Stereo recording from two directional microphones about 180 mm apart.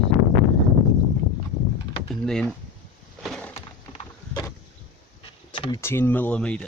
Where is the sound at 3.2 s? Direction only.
5° left (ahead or behind).